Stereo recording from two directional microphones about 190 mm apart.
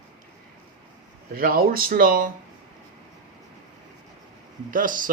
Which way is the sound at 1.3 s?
50° right (ahead or behind).